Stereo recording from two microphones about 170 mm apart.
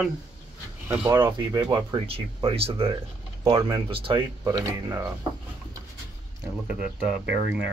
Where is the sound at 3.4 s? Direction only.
25° right (ahead or behind).